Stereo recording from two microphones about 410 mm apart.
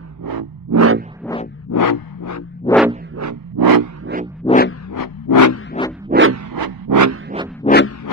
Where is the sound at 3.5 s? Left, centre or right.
Right.